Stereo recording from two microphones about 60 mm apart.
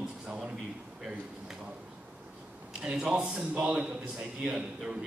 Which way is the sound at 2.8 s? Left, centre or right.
Centre.